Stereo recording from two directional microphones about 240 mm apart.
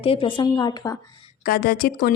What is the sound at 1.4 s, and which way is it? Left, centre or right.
Speech, left.